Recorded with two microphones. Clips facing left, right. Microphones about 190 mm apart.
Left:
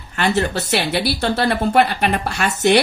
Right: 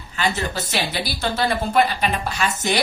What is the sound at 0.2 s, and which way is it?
Speech, 65° left (ahead or behind).